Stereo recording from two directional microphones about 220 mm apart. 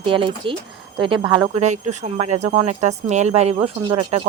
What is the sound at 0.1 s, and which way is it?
Speech, 20° right (ahead or behind).